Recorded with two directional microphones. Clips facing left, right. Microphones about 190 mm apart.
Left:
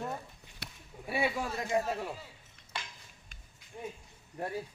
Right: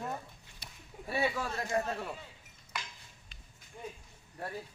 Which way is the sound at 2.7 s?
30° left (ahead or behind).